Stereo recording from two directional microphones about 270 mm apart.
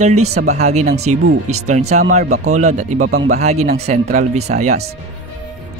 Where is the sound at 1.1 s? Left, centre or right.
Right.